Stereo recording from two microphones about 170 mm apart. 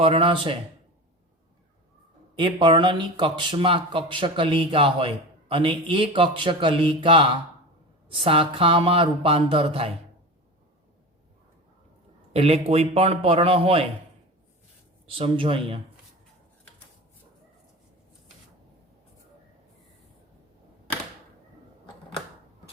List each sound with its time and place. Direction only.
0.0 s speech: 35° right (ahead or behind)
2.3 s speech: 30° right (ahead or behind)
12.3 s speech: 35° right (ahead or behind)
15.0 s speech: 30° right (ahead or behind)